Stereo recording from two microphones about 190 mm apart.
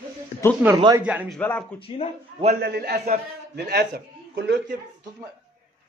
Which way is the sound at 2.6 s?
55° right (ahead or behind).